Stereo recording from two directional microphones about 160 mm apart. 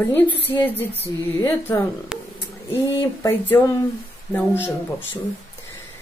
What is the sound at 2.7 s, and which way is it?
Speech, 15° left (ahead or behind).